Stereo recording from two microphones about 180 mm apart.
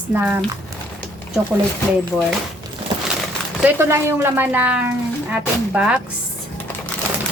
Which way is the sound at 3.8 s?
15° right (ahead or behind).